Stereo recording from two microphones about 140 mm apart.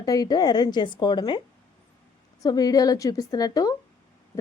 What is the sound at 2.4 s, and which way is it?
A woman's voice, 25° left (ahead or behind).